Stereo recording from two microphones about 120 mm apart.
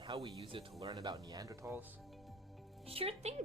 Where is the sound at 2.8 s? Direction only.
55° right (ahead or behind).